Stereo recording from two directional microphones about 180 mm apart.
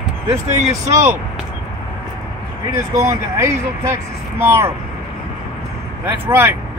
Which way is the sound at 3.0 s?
15° right (ahead or behind).